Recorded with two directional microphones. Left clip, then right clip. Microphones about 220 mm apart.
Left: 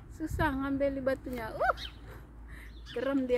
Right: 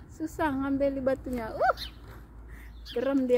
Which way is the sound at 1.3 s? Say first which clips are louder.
Right 5 dB; 15° right (ahead or behind).